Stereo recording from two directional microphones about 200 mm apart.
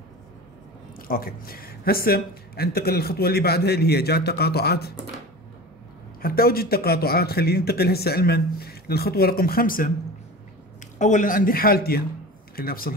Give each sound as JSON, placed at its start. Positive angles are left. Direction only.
{"t": 0.9, "sound": "speech", "side_deg": 45}
{"t": 6.2, "sound": "speech", "side_deg": 50}
{"t": 11.0, "sound": "speech", "side_deg": 40}